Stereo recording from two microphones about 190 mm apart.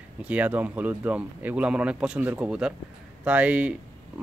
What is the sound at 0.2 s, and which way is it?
Speech, 5° right (ahead or behind).